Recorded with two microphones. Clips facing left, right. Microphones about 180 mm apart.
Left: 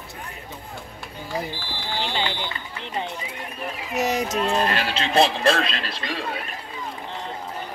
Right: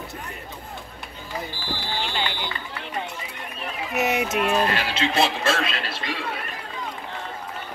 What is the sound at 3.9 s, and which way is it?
Speech, 5° right (ahead or behind).